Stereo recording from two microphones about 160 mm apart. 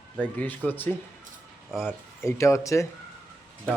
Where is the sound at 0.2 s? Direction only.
10° left (ahead or behind).